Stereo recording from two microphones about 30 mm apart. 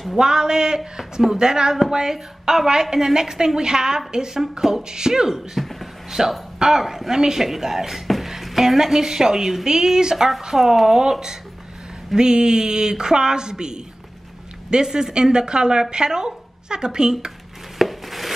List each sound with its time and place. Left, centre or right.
0.2 s a woman's voice: right
4.4 s a woman's voice: centre
5.6 s a sound: centre
6.0 s speech: centre
7.2 s a woman's voice: right
7.4 s a woman's voice: centre
10.5 s a woman's voice: centre
17.7 s a sound: centre